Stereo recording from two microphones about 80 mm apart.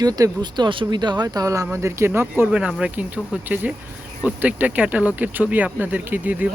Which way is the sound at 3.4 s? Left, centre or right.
Right.